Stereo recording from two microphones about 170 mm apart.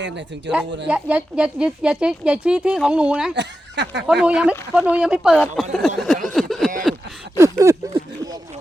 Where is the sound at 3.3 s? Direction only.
90° right.